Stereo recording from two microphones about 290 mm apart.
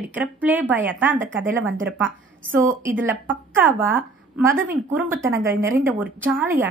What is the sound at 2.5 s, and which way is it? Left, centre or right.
A woman's voice, centre.